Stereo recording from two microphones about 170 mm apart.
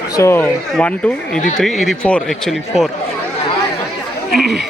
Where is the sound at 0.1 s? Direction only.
15° left (ahead or behind); by 2.9 s centre (ahead or behind).